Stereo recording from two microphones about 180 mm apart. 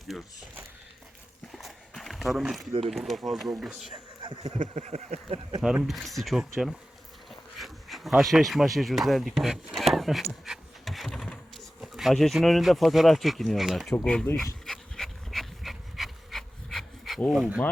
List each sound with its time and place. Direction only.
0.1 s speech: centre (ahead or behind)
1.5 s walk: centre (ahead or behind)
2.8 s speech: centre (ahead or behind)
4.2 s speech: 35° right (ahead or behind)
5.6 s speech: centre (ahead or behind)
7.3 s bee: centre (ahead or behind)
8.2 s speech: centre (ahead or behind)
10.4 s a sound: centre (ahead or behind)
13.9 s dog: 5° left (ahead or behind)